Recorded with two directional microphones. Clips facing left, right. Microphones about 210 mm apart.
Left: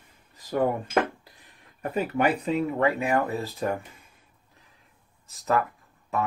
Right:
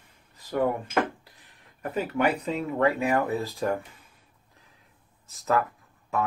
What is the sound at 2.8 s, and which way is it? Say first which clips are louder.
Speech: right 4 dB; centre (ahead or behind).